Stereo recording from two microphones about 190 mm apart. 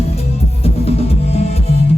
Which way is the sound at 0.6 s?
35° left (ahead or behind).